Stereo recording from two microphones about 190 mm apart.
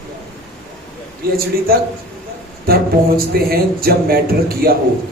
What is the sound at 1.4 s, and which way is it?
Speech, 50° right (ahead or behind).